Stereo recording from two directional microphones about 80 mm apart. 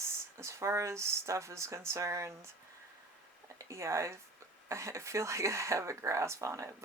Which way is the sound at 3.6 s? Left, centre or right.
Right.